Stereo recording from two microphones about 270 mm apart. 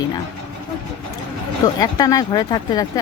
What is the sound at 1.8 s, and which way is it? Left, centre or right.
Speech, centre.